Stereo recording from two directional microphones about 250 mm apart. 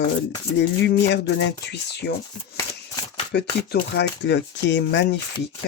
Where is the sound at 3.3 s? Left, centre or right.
Left.